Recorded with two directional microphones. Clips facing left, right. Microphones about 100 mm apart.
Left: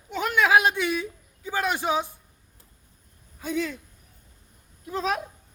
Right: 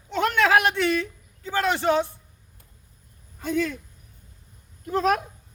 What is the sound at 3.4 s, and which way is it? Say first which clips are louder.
Speech: right 3 dB; 55° right (ahead or behind).